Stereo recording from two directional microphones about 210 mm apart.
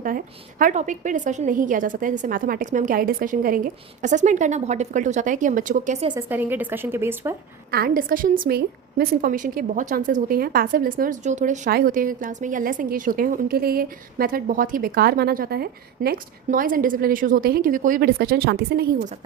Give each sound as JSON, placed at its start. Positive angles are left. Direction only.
{"t": 0.6, "sound": "a woman's voice", "side_deg": -35}
{"t": 6.1, "sound": "a woman's voice", "side_deg": -10}
{"t": 7.7, "sound": "a woman's voice", "side_deg": -45}